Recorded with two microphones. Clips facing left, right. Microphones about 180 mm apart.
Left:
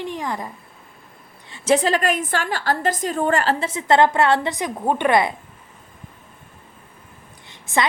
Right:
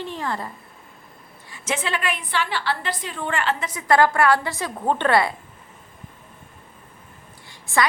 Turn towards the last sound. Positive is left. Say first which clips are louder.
# even
turn(degrees=20)  # may be behind; listen again after turning